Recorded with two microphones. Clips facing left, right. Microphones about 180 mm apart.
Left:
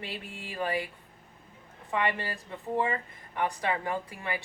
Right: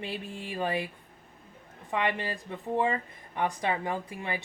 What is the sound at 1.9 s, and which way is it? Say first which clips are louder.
Speech: even; 20° right (ahead or behind).